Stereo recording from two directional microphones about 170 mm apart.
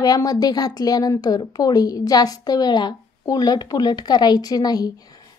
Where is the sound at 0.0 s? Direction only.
20° left (ahead or behind).